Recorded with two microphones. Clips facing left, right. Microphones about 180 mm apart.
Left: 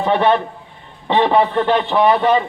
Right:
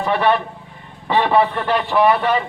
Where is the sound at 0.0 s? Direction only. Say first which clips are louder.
Left 2 dB; 25° left (ahead or behind).